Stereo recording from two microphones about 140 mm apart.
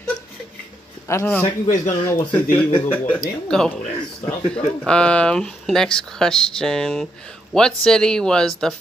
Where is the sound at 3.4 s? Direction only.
5° left (ahead or behind).